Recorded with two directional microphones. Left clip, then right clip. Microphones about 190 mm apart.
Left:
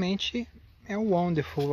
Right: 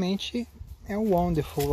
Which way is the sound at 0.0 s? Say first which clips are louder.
Even; 10° right (ahead or behind).